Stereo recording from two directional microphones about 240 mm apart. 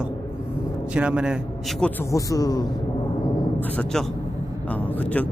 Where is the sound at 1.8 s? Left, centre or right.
Centre.